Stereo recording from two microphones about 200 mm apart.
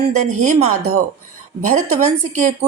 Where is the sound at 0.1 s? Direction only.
35° right (ahead or behind).